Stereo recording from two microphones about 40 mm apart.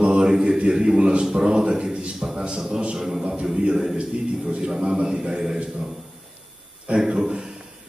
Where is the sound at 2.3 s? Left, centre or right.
Right.